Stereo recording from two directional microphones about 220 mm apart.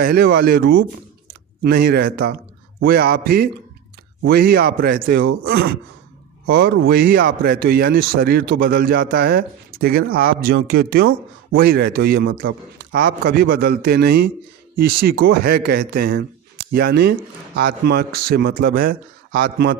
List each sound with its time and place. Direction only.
0.0 s speech: 45° right (ahead or behind)